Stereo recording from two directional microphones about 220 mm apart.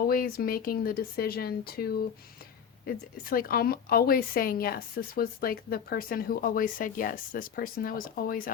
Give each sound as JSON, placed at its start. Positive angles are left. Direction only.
{"t": 0.1, "sound": "speech", "side_deg": 40}